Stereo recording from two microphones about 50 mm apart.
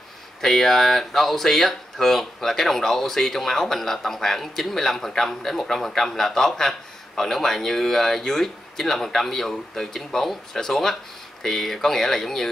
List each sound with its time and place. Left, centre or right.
0.4 s speech: centre